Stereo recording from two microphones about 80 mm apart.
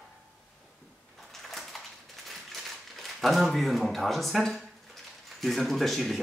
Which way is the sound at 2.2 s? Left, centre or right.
Centre.